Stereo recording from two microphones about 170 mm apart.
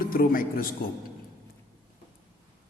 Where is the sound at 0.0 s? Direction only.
55° left (ahead or behind).